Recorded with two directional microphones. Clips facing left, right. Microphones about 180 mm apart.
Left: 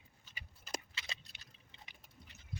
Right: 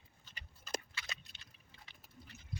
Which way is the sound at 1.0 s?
25° left (ahead or behind).